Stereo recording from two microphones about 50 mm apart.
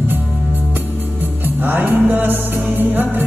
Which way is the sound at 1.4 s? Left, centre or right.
Right.